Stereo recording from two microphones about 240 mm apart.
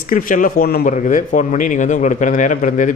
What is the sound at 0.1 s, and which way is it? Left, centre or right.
A man's voice, left.